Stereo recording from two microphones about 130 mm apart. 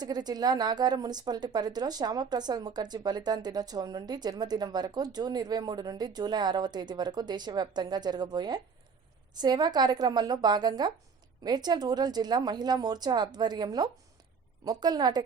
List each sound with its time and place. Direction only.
0.0 s a woman's voice: 30° right (ahead or behind)